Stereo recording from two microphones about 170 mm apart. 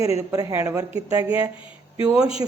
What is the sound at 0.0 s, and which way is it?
A man's voice, 20° right (ahead or behind).